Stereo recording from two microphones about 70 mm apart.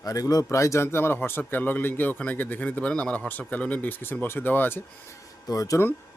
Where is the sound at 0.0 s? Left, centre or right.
Left.